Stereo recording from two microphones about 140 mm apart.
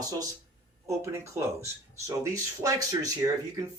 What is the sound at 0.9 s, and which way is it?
Speech, 20° right (ahead or behind).